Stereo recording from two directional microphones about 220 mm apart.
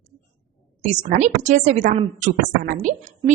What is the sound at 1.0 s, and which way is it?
A woman's voice, 35° right (ahead or behind).